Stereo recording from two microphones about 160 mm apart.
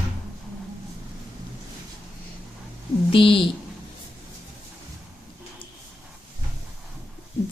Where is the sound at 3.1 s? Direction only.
35° left (ahead or behind).